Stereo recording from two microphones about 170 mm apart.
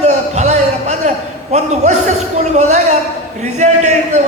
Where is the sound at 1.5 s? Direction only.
45° right (ahead or behind).